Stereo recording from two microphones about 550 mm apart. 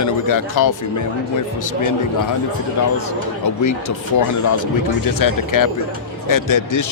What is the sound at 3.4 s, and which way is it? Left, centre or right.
Speech, left.